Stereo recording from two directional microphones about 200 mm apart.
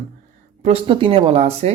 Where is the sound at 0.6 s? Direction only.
30° right (ahead or behind).